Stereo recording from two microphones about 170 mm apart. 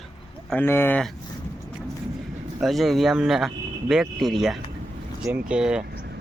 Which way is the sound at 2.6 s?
Centre (ahead or behind).